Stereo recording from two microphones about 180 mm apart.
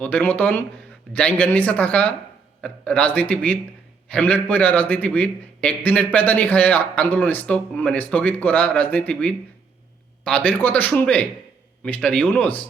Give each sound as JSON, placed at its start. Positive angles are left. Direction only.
{"t": 0.0, "sound": "a man's voice", "side_deg": 10}